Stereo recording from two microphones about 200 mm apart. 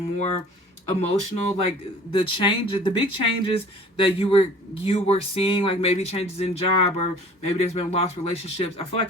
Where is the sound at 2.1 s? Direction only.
25° left (ahead or behind).